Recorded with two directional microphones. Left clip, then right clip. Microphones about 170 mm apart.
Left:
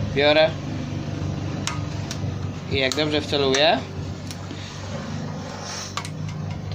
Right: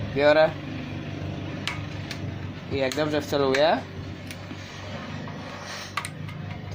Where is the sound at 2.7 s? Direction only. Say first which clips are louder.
Left 3 dB; 20° right (ahead or behind).